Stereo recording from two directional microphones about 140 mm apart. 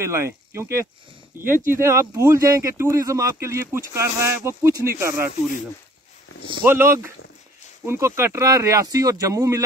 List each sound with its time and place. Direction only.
0.0 s speech: 20° right (ahead or behind)
6.6 s speech: 15° right (ahead or behind)